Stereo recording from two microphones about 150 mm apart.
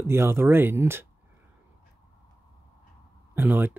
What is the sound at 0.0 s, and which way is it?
Speech, 15° right (ahead or behind).